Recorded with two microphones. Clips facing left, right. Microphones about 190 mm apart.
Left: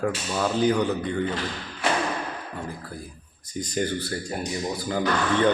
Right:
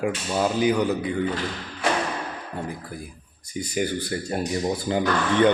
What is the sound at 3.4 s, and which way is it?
Speech, 10° right (ahead or behind).